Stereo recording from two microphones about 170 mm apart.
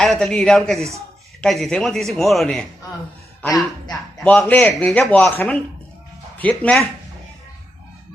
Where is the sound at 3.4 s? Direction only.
20° left (ahead or behind).